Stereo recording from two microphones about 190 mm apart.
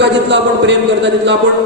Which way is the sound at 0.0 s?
70° right (ahead or behind).